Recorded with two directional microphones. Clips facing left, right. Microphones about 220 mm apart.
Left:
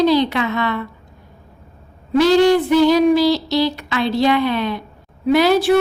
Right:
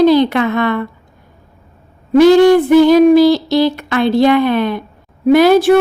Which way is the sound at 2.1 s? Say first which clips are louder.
Right 6 dB; 50° right (ahead or behind).